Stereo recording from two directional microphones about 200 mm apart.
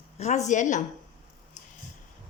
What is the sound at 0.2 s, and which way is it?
Speech, 35° left (ahead or behind).